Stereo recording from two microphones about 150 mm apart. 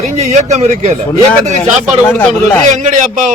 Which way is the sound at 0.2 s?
50° right (ahead or behind).